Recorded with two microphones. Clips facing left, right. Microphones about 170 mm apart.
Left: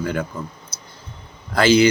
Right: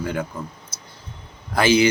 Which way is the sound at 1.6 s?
15° right (ahead or behind).